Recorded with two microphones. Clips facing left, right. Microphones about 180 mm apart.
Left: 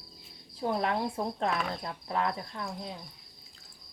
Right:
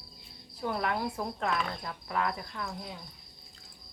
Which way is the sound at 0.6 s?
30° left (ahead or behind).